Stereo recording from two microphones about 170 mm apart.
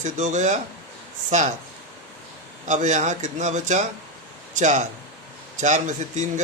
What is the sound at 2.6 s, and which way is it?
A man's voice, 45° right (ahead or behind).